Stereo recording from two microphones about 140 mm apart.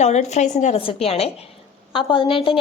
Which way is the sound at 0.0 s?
55° left (ahead or behind).